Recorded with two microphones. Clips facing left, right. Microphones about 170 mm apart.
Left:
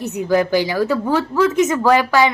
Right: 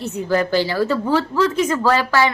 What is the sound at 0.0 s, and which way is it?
A woman's voice, 15° left (ahead or behind).